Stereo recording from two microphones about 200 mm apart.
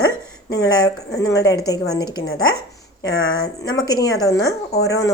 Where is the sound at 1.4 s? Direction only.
20° left (ahead or behind).